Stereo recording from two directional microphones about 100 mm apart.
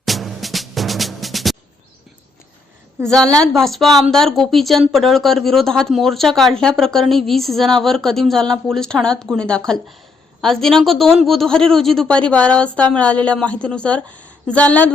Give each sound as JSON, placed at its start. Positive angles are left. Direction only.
{"t": 0.0, "sound": "music", "side_deg": 0}
{"t": 3.1, "sound": "speech", "side_deg": 5}